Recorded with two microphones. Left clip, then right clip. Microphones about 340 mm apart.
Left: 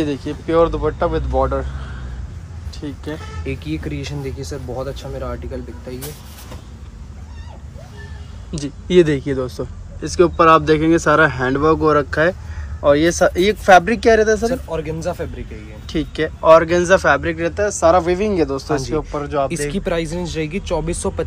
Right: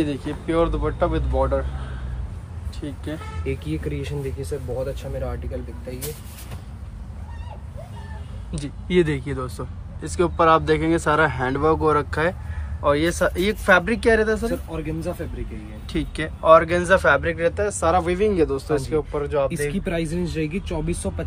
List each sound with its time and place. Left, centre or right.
0.0 s speech: centre
2.8 s speech: centre
5.9 s speech: centre
8.5 s speech: centre
14.7 s speech: centre
15.9 s speech: centre
19.7 s speech: centre